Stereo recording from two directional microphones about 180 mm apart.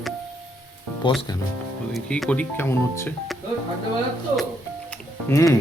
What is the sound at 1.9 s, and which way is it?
Speech, centre (ahead or behind).